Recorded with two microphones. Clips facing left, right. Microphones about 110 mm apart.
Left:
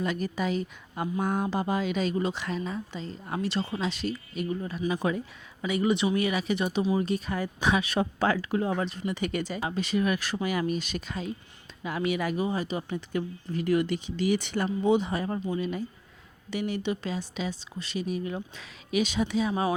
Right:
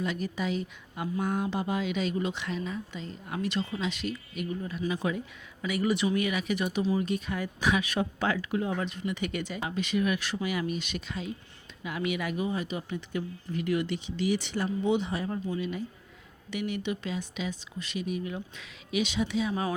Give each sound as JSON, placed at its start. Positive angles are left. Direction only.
{"t": 0.0, "sound": "a woman's voice", "side_deg": 45}
{"t": 5.6, "sound": "a woman's voice", "side_deg": 25}